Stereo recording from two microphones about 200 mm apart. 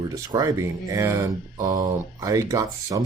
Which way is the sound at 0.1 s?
20° right (ahead or behind).